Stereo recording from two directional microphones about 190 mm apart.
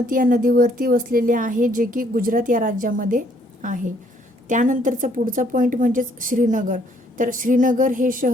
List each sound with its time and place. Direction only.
0.1 s speech: 45° right (ahead or behind)